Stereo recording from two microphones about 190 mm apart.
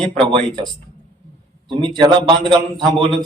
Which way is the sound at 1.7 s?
25° right (ahead or behind).